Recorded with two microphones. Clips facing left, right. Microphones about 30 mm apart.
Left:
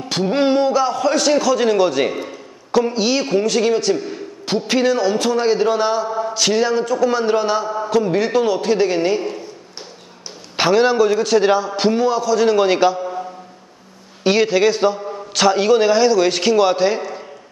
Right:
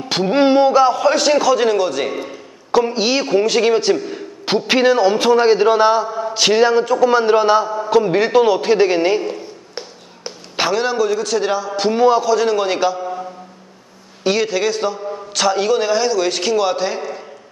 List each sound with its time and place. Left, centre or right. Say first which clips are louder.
0.1 s a man's voice: right 3 dB; centre
1.8 s a man's voice: left 2 dB; centre
6.0 s a sound: left 1 dB; centre
6.3 s a man's voice: right 5 dB; centre
9.3 s tap: right 3 dB; right
10.5 s a man's voice: left 3 dB; centre
11.9 s a man's voice: right 5 dB; centre
12.4 s a man's voice: left 2 dB; centre
14.2 s a man's voice: left 3 dB; centre